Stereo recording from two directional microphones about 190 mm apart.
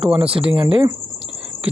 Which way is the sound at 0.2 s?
30° right (ahead or behind).